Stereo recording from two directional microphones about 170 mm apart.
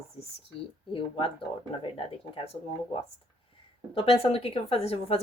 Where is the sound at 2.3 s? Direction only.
35° left (ahead or behind).